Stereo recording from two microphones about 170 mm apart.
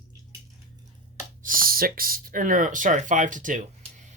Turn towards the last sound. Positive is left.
turn(degrees=-50)  # may be behind; listen again after turning